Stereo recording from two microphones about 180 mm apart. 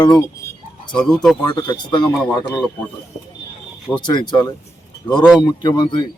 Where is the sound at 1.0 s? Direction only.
5° left (ahead or behind).